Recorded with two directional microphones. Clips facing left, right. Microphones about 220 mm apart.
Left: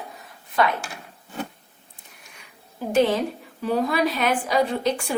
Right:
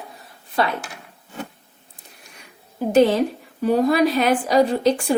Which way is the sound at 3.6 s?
40° right (ahead or behind).